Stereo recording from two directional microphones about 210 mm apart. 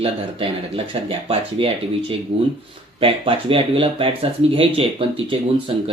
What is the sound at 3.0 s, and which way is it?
Speech, 25° right (ahead or behind).